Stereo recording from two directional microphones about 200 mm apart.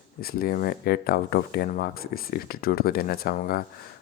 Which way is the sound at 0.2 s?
50° left (ahead or behind).